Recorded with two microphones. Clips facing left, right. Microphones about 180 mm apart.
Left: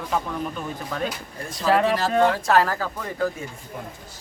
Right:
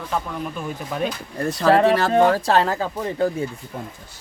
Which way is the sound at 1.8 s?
65° right (ahead or behind).